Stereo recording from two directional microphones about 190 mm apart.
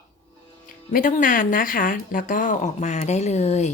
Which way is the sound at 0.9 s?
45° left (ahead or behind).